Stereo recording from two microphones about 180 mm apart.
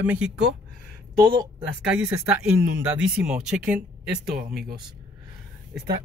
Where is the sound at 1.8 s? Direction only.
5° right (ahead or behind).